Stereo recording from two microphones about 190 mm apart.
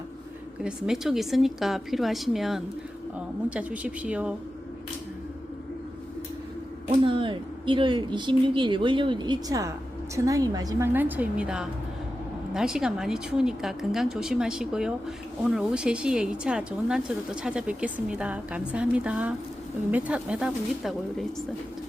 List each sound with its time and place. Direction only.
0.6 s a woman's voice: 5° right (ahead or behind)
7.0 s a woman's voice: 25° right (ahead or behind); by 21.2 s centre (ahead or behind)